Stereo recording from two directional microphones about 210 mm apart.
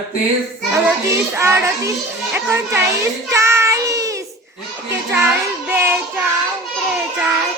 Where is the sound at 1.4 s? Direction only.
15° right (ahead or behind).